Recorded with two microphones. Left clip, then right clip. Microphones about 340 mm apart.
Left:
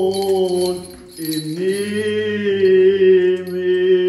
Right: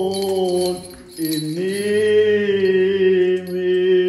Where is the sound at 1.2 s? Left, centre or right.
Centre.